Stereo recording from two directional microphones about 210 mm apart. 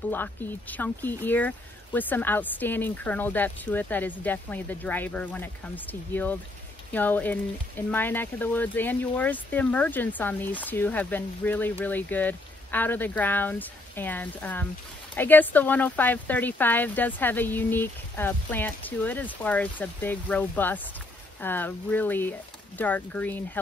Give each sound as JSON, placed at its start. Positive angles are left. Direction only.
{"t": 0.1, "sound": "speech", "side_deg": 10}